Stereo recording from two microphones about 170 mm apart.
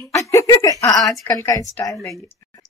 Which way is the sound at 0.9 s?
Centre (ahead or behind).